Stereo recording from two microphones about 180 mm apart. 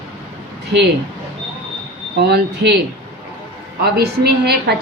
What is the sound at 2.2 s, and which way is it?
Speech, 65° right (ahead or behind).